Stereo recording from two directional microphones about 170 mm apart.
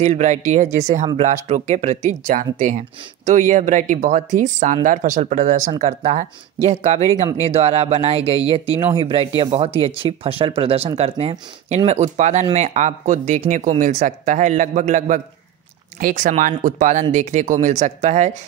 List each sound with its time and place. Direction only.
0.0 s speech: 45° right (ahead or behind)